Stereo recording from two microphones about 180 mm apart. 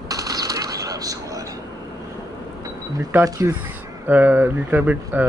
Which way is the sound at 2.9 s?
20° right (ahead or behind).